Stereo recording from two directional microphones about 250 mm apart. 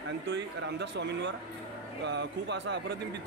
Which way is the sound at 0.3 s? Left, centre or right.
Right.